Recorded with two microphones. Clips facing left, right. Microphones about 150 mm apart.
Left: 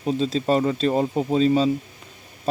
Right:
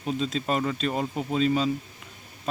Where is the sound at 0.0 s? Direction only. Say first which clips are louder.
Left 5 dB; 35° left (ahead or behind).